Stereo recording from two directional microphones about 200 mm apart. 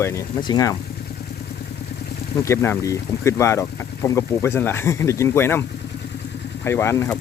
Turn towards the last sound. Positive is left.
turn(degrees=15)  # may be behind; listen again after turning